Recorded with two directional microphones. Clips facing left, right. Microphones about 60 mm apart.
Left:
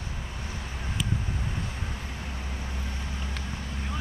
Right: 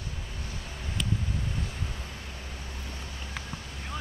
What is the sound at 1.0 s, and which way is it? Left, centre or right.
Vehicle, centre.